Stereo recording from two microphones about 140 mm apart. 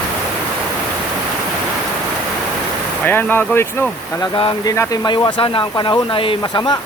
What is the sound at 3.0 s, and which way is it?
Speech, 15° left (ahead or behind).